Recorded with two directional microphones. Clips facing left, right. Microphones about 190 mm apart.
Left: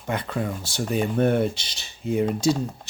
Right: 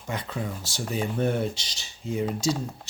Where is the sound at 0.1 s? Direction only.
60° left (ahead or behind).